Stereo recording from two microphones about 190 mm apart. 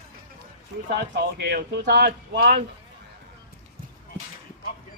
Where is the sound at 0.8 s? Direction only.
60° right (ahead or behind).